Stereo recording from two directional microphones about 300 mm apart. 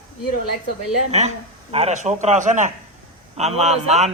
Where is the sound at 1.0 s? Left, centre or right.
Right.